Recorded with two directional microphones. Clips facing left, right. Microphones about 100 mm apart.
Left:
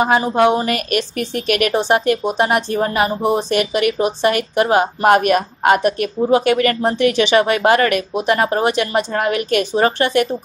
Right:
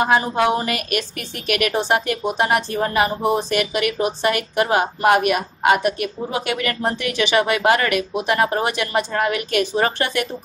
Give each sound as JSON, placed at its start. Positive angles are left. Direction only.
{"t": 0.0, "sound": "speech", "side_deg": 25}
{"t": 0.7, "sound": "speech", "side_deg": 35}